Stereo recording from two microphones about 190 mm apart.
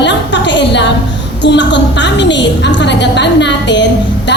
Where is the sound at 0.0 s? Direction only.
70° left (ahead or behind).